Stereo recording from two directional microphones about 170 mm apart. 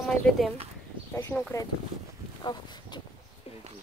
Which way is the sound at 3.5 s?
35° left (ahead or behind).